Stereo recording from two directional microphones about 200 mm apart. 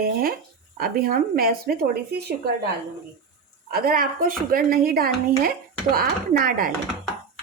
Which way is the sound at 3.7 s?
45° right (ahead or behind).